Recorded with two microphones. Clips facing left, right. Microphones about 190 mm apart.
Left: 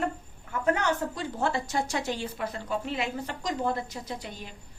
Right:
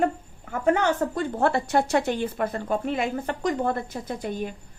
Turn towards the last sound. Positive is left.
turn(degrees=-50)  # may be behind; listen again after turning